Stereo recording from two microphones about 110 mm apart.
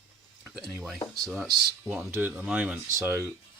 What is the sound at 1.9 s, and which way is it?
Speech, 20° right (ahead or behind).